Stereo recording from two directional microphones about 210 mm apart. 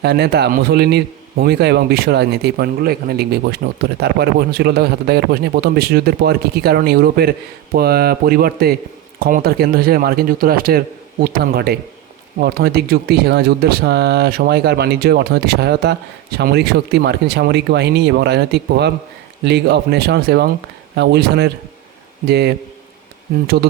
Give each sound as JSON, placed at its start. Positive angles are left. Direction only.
{"t": 0.0, "sound": "a man's voice", "side_deg": -50}